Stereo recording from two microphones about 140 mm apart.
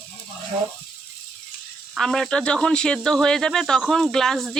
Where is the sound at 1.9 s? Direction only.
5° left (ahead or behind).